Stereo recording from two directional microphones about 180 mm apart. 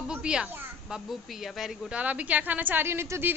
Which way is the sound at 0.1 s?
5° right (ahead or behind).